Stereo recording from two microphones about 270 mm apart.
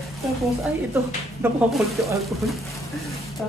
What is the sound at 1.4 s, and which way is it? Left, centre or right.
Speech, centre.